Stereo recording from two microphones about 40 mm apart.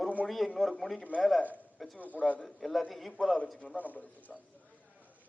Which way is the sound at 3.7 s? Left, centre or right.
Left.